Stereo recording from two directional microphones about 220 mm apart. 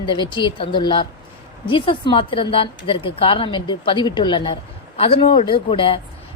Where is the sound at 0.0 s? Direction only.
20° left (ahead or behind).